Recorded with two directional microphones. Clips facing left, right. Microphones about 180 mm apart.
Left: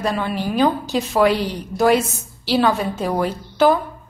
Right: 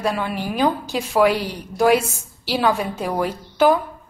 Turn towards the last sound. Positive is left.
turn(degrees=-10)  # may be behind; listen again after turning